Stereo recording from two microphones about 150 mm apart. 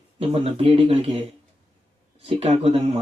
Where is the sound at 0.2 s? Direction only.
40° right (ahead or behind).